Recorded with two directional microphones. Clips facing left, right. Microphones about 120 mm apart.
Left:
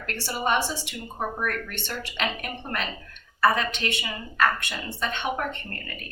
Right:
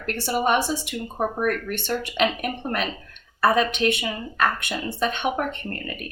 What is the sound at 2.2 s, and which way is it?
A woman's voice, 15° right (ahead or behind).